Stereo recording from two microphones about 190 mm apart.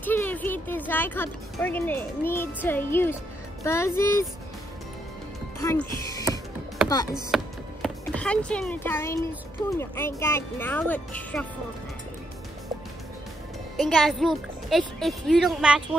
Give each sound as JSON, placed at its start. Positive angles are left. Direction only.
{"t": 0.0, "sound": "speech", "side_deg": 10}
{"t": 5.6, "sound": "speech", "side_deg": 20}
{"t": 7.2, "sound": "music", "side_deg": 0}
{"t": 8.0, "sound": "a child's voice", "side_deg": 5}
{"t": 13.7, "sound": "speech", "side_deg": 0}